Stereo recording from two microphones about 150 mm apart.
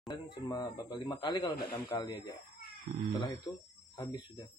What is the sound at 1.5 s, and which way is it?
Speech, 90° left.